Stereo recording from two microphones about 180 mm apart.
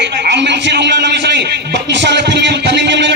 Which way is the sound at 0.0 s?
70° right (ahead or behind).